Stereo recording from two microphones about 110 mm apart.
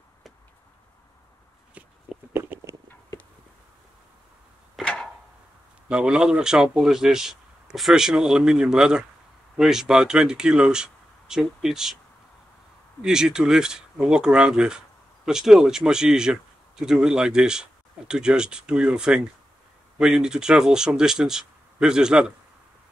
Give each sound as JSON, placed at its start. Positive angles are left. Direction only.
{"t": 2.3, "sound": "a sound", "side_deg": -20}
{"t": 4.7, "sound": "arrow", "side_deg": 10}
{"t": 5.9, "sound": "a man's voice", "side_deg": -10}
{"t": 13.0, "sound": "a man's voice", "side_deg": -5}